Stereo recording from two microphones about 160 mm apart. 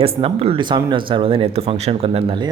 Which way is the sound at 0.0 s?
35° right (ahead or behind).